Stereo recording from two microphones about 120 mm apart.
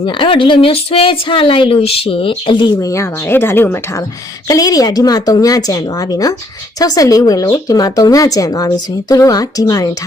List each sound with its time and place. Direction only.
0.0 s a woman's voice: 45° left (ahead or behind)
2.9 s speech: 20° left (ahead or behind)
4.4 s a woman's voice: 30° left (ahead or behind)